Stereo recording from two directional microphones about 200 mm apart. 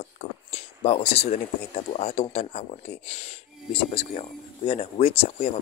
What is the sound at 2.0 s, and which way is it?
Speech, 35° left (ahead or behind).